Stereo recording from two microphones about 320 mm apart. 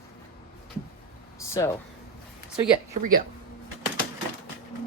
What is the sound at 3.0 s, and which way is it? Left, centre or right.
Speech, right.